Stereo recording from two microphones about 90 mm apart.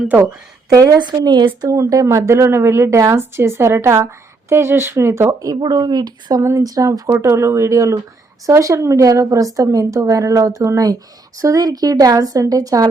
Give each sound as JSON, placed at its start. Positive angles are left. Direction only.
{"t": 0.2, "sound": "speech", "side_deg": -30}
{"t": 0.9, "sound": "a woman's voice", "side_deg": -50}
{"t": 1.6, "sound": "speech", "side_deg": -35}
{"t": 5.5, "sound": "a woman's voice", "side_deg": -50}